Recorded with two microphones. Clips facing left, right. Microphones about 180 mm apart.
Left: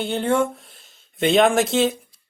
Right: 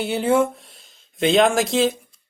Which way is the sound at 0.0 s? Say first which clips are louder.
Right 2 dB; 5° right (ahead or behind).